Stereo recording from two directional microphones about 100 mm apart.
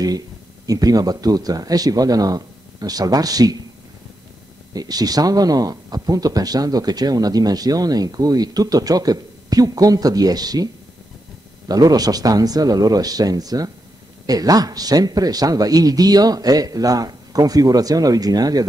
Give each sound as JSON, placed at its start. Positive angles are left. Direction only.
{"t": 0.7, "sound": "speech", "side_deg": -40}
{"t": 4.7, "sound": "speech", "side_deg": -40}